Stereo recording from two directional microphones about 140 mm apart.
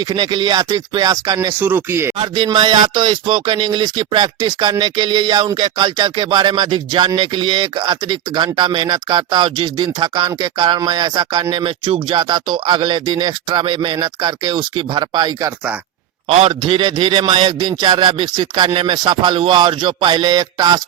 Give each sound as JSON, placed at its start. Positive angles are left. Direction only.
{"t": 0.0, "sound": "speech", "side_deg": -30}
{"t": 1.5, "sound": "speech", "side_deg": -15}
{"t": 2.1, "sound": "speech", "side_deg": -35}
{"t": 16.3, "sound": "speech", "side_deg": -40}